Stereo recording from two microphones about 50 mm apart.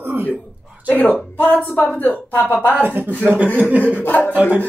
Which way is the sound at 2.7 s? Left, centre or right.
Right.